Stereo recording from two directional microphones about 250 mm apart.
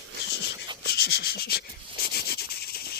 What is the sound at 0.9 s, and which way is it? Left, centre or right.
Rub, left.